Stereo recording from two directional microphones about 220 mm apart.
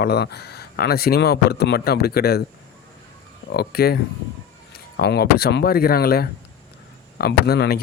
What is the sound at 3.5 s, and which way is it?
Speech, 45° left (ahead or behind).